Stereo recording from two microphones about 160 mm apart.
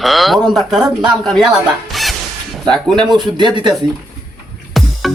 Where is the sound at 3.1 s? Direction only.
30° right (ahead or behind).